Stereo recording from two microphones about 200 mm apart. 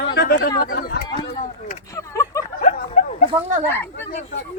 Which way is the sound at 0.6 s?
50° left (ahead or behind).